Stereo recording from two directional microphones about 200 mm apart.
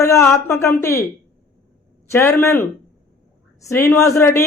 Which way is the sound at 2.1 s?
15° left (ahead or behind).